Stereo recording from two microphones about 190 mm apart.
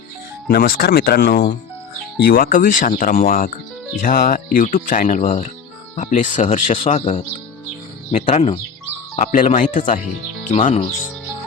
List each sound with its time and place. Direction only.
0.4 s speech: 50° left (ahead or behind)
5.2 s speech: 30° left (ahead or behind)